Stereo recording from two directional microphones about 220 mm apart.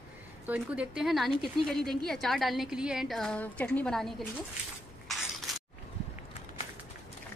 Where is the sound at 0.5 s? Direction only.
5° right (ahead or behind).